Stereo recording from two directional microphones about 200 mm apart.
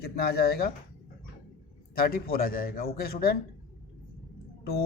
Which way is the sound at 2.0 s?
45° left (ahead or behind).